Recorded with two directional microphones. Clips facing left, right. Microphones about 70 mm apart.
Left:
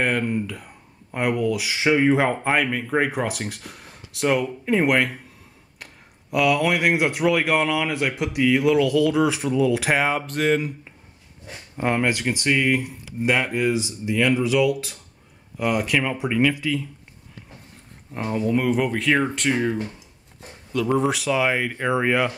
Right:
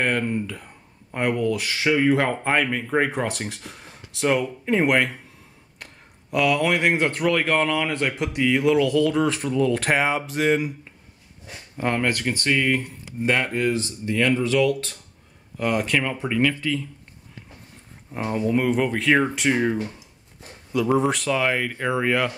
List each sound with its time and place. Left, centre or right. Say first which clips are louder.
0.0 s speech: left 1 dB; centre
6.3 s speech: left 1 dB; centre
11.7 s speech: left 1 dB; centre
18.1 s speech: even; centre
21.8 s speech: left 1 dB; centre